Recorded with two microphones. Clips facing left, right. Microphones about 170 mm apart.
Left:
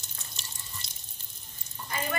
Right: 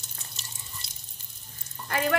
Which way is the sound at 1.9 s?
75° right (ahead or behind).